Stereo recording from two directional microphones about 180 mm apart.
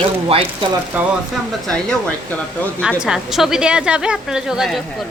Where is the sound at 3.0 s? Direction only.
Centre (ahead or behind).